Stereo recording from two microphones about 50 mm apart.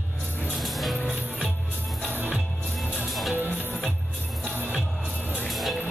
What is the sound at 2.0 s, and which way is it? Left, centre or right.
Music, right.